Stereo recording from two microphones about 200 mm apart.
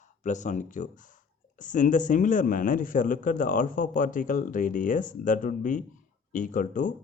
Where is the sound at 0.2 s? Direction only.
35° left (ahead or behind).